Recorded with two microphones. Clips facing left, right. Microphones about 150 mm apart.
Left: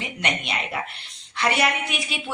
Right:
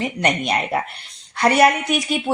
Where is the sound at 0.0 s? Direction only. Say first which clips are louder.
Right 8 dB; 45° right (ahead or behind).